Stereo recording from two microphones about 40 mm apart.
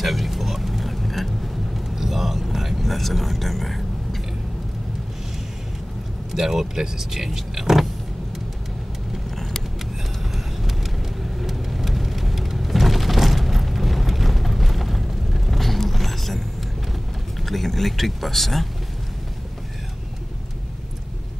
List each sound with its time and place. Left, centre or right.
0.0 s a sound: centre
6.3 s speech: centre
9.3 s vehicle: centre
17.4 s speech: centre